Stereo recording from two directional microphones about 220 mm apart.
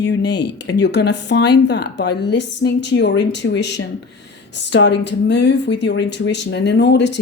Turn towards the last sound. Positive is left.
turn(degrees=50)  # may be behind; listen again after turning